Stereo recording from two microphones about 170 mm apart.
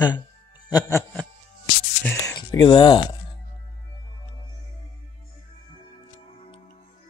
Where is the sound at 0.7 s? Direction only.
15° left (ahead or behind).